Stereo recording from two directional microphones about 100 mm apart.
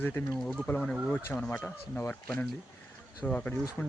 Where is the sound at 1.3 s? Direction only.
20° left (ahead or behind).